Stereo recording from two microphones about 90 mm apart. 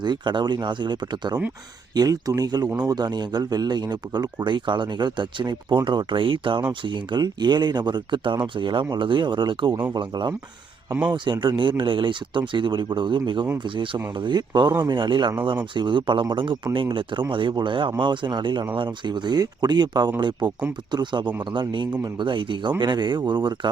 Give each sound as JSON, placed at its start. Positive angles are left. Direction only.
{"t": 0.0, "sound": "speech", "side_deg": -60}
{"t": 2.0, "sound": "speech", "side_deg": -45}